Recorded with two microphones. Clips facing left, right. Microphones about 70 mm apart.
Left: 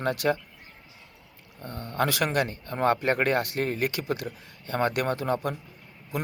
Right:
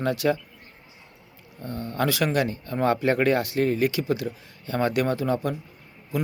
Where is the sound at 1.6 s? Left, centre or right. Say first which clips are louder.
Right 2 dB; left.